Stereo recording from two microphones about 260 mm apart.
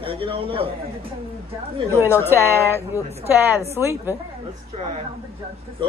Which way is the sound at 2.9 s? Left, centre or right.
Centre.